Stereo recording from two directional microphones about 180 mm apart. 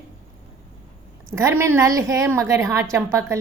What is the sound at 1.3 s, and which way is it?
A woman's voice, 15° right (ahead or behind).